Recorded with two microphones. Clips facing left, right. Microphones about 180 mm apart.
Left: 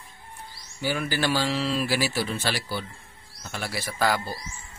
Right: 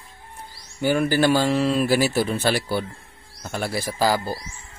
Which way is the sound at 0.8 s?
50° right (ahead or behind).